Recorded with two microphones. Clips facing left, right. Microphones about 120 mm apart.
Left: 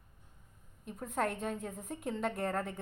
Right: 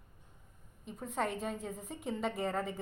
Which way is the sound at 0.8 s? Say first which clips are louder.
Left 1 dB; centre (ahead or behind).